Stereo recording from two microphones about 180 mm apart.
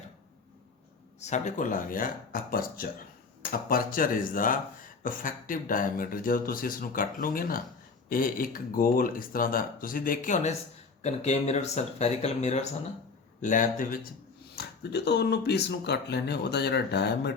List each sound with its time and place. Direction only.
1.2 s speech: 40° left (ahead or behind)
14.5 s speech: 65° left (ahead or behind)